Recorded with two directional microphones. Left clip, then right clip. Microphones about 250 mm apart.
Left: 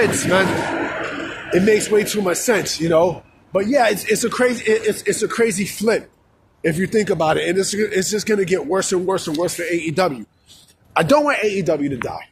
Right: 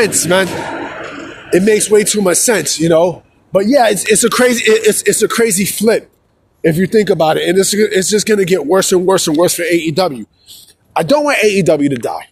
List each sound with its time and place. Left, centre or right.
0.0 s speech: right
0.9 s a sound: centre
1.5 s speech: right
6.6 s a man's voice: right